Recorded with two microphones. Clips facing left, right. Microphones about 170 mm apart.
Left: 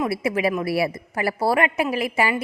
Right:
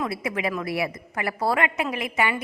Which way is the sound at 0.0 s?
25° left (ahead or behind).